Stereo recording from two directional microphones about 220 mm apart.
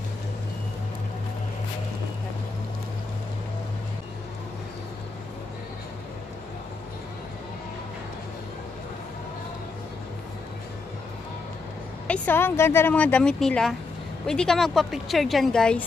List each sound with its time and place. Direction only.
12.1 s a woman's voice: 10° left (ahead or behind)